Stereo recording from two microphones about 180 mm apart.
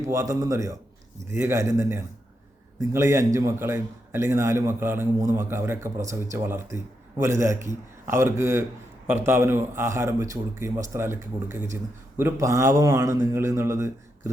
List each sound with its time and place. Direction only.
0.0 s speech: 15° right (ahead or behind)